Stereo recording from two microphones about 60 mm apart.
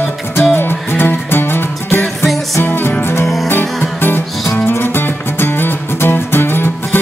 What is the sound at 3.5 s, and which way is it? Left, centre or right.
Music, left.